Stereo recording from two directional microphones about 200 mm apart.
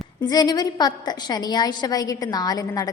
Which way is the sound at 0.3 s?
20° left (ahead or behind).